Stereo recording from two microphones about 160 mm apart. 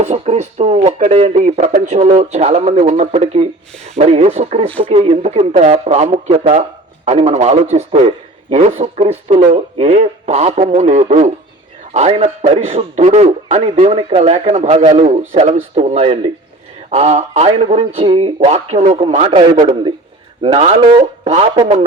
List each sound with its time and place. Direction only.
0.0 s speech: 45° right (ahead or behind)